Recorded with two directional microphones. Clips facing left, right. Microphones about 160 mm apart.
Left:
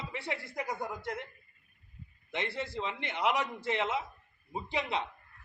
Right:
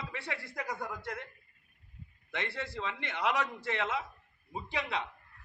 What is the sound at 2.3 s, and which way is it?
A man's voice, 20° left (ahead or behind).